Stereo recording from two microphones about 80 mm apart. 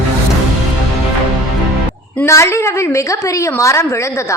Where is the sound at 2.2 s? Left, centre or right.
Left.